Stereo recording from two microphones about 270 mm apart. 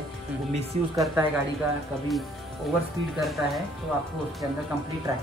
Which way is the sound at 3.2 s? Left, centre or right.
Centre.